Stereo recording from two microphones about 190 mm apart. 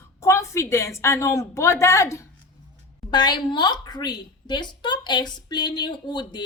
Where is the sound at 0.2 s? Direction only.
15° left (ahead or behind).